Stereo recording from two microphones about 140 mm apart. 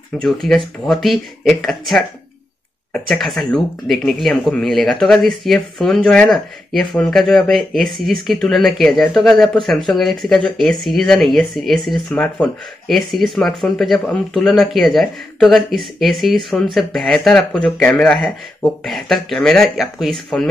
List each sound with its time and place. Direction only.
0.2 s speech: centre (ahead or behind)